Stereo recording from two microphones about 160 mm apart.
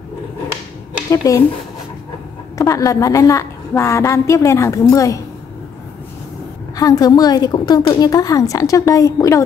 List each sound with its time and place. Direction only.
1.1 s a woman's voice: 20° left (ahead or behind)
2.5 s a woman's voice: 20° left (ahead or behind)
6.8 s a woman's voice: 25° left (ahead or behind)